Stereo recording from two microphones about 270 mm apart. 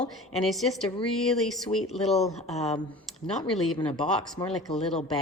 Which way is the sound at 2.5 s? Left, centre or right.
Left.